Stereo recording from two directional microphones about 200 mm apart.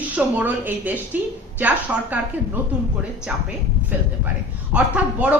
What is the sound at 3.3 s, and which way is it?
Speech, 5° right (ahead or behind).